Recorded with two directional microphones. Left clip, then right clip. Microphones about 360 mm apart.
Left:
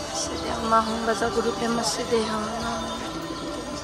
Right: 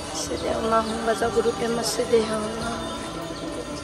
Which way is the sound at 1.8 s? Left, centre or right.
Centre.